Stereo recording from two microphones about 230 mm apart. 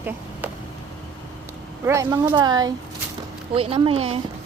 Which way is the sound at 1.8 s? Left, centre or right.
Centre.